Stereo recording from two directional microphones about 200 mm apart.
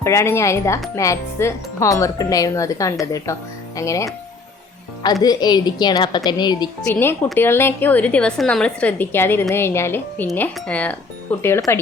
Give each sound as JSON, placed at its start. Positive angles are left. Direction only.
{"t": 0.0, "sound": "a woman's voice", "side_deg": 15}
{"t": 5.2, "sound": "a woman's voice", "side_deg": 20}
{"t": 6.8, "sound": "a woman's voice", "side_deg": 10}